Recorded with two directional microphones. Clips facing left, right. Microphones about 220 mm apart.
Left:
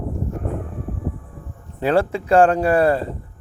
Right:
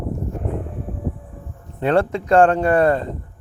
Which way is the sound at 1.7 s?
5° left (ahead or behind).